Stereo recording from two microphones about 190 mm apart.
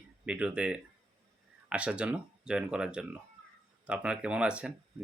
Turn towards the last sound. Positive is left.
turn(degrees=-5)  # may be behind; listen again after turning